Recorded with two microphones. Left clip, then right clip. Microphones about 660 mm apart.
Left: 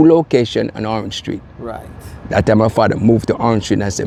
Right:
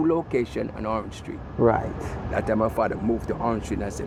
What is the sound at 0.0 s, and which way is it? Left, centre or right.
Speech, left.